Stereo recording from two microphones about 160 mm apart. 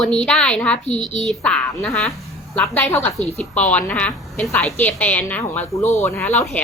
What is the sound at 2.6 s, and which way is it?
A woman's voice, 15° left (ahead or behind).